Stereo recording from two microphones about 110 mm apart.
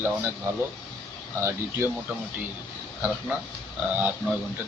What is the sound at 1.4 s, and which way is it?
Speech, 25° right (ahead or behind).